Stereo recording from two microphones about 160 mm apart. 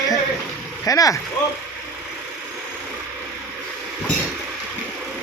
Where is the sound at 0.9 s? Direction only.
20° left (ahead or behind).